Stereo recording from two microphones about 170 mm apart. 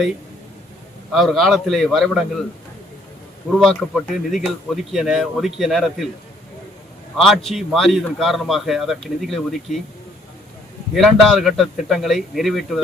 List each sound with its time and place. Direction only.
1.1 s a man's voice: centre (ahead or behind)
3.6 s a man's voice: centre (ahead or behind)
7.2 s a man's voice: centre (ahead or behind)
10.9 s a man's voice: centre (ahead or behind)